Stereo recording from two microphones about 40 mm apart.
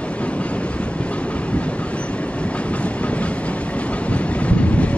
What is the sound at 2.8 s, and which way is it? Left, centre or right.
Train, left.